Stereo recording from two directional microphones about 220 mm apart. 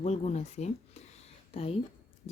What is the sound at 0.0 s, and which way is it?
Speech, 30° left (ahead or behind).